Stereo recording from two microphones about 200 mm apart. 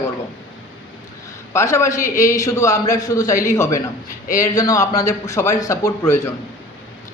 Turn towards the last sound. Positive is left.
turn(degrees=15)  # may be behind; listen again after turning